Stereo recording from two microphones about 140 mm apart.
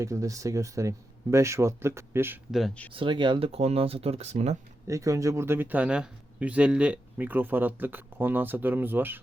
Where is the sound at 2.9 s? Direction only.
35° right (ahead or behind); by 4.5 s 50° right (ahead or behind).